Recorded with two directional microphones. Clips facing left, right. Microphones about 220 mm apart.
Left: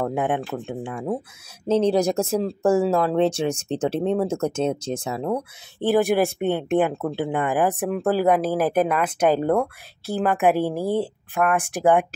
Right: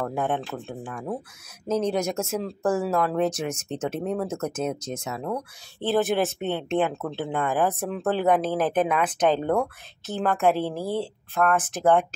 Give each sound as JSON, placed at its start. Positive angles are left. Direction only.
{"t": 0.0, "sound": "speech", "side_deg": 20}
{"t": 5.8, "sound": "speech", "side_deg": 15}